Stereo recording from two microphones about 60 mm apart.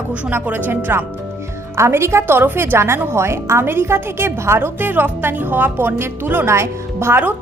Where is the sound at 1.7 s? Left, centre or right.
Right.